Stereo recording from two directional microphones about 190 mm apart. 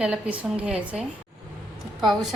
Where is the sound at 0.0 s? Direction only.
5° right (ahead or behind).